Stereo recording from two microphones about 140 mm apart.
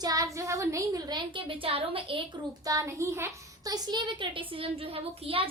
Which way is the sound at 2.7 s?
25° right (ahead or behind).